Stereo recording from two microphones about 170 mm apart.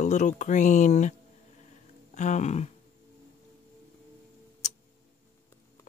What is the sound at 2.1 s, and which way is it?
Speech, 45° left (ahead or behind).